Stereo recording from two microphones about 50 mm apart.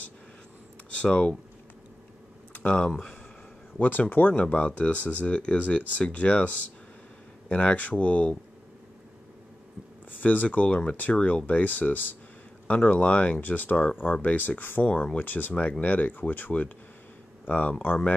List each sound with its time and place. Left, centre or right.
0.8 s a sound: left
2.7 s speech: centre
3.8 s speech: left
10.2 s speech: left